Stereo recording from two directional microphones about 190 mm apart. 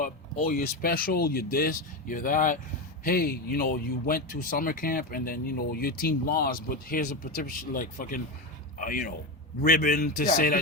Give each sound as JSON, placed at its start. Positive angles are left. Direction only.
{"t": 0.5, "sound": "speech", "side_deg": 50}